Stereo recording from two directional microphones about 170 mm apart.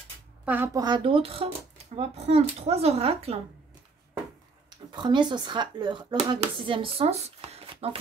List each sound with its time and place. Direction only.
0.5 s speech: 10° right (ahead or behind)
0.8 s speech: 30° right (ahead or behind)
4.6 s speech: 25° right (ahead or behind)